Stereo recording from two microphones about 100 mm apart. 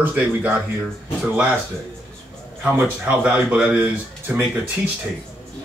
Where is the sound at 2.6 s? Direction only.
15° right (ahead or behind).